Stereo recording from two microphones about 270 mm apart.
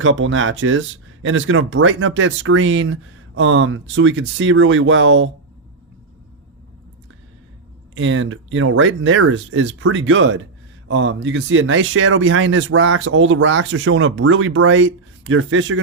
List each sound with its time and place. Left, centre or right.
0.0 s speech: right
7.9 s speech: right